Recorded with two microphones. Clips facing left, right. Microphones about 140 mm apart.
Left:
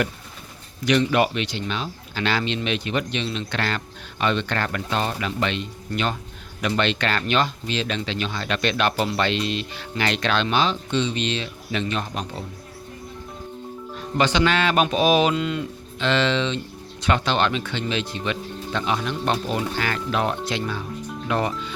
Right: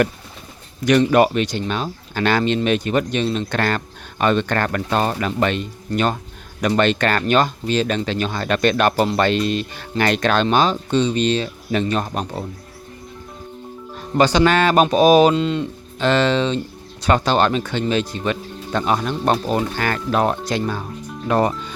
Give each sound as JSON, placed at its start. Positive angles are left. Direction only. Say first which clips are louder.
{"t": 0.9, "sound": "speech", "louder": "right 5 dB", "side_deg": -45}
{"t": 13.9, "sound": "speech", "louder": "right 5 dB", "side_deg": -40}
{"t": 16.0, "sound": "speech", "louder": "right 5 dB", "side_deg": -45}